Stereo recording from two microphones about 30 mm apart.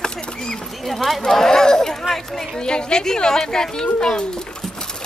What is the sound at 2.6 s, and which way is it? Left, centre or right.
A child's voice, left.